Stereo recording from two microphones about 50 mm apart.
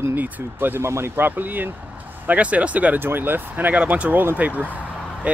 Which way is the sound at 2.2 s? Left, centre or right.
Right.